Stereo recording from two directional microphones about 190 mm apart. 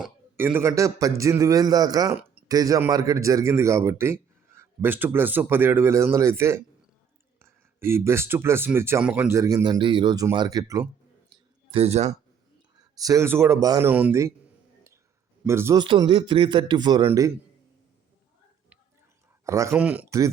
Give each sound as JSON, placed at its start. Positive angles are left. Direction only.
{"t": 0.0, "sound": "a man's voice", "side_deg": -10}
{"t": 11.7, "sound": "speech", "side_deg": -35}
{"t": 13.0, "sound": "a man's voice", "side_deg": -15}
{"t": 15.4, "sound": "a man's voice", "side_deg": -15}
{"t": 19.5, "sound": "a man's voice", "side_deg": -15}